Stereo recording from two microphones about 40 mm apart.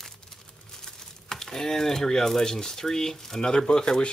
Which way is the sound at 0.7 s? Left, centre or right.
Centre.